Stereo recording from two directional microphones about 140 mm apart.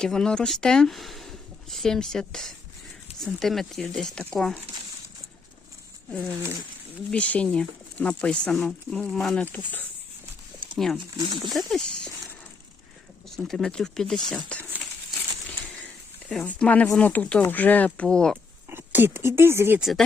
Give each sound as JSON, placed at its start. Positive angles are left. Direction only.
{"t": 0.0, "sound": "speech", "side_deg": 5}
{"t": 6.2, "sound": "speech", "side_deg": -20}
{"t": 7.1, "sound": "speech", "side_deg": 10}
{"t": 13.3, "sound": "speech", "side_deg": 5}
{"t": 15.4, "sound": "a sound", "side_deg": 5}
{"t": 16.3, "sound": "speech", "side_deg": 10}
{"t": 18.7, "sound": "speech", "side_deg": -15}
{"t": 19.8, "sound": "speech", "side_deg": 0}